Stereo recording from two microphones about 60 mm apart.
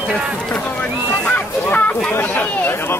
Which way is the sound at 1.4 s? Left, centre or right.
Left.